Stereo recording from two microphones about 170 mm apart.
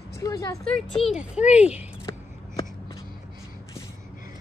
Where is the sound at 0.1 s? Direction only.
20° left (ahead or behind).